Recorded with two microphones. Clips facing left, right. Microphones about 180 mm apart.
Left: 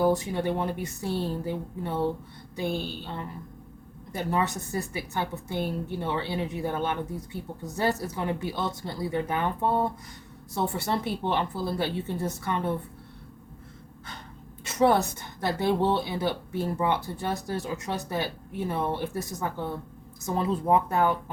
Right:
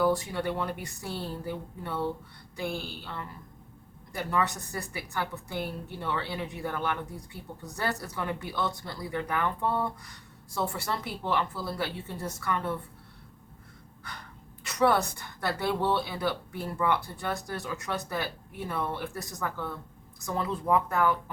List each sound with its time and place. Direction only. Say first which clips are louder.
0.0 s a woman's voice: left 2 dB; 20° left (ahead or behind)
14.6 s a woman's voice: left 3 dB; 25° left (ahead or behind)